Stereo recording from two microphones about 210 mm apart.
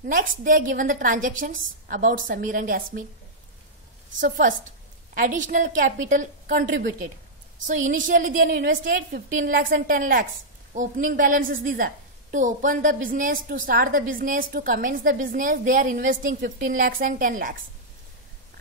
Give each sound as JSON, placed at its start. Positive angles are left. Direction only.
{"t": 0.0, "sound": "a woman's voice", "side_deg": -40}
{"t": 4.2, "sound": "a woman's voice", "side_deg": -40}